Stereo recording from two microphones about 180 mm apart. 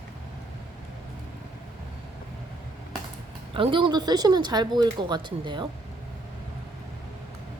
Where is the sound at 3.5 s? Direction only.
30° right (ahead or behind).